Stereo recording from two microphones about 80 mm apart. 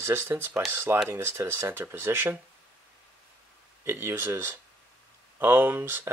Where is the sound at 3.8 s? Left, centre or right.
Right.